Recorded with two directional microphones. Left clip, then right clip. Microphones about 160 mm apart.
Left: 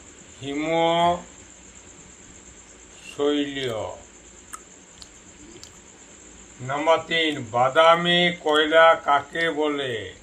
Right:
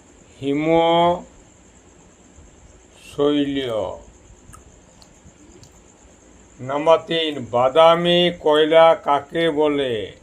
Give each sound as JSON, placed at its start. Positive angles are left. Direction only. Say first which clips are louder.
{"t": 0.4, "sound": "speech", "louder": "right 5 dB", "side_deg": -85}
{"t": 3.2, "sound": "speech", "louder": "right 4 dB", "side_deg": -85}
{"t": 6.7, "sound": "speech", "louder": "right 4 dB", "side_deg": -90}